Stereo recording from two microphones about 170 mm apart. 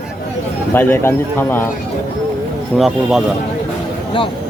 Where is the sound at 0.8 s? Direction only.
10° left (ahead or behind).